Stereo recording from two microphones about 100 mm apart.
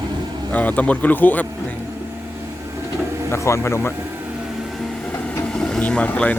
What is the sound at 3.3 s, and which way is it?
Speech, 30° left (ahead or behind).